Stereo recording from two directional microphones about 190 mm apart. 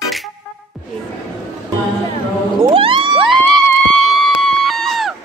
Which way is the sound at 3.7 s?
5° left (ahead or behind).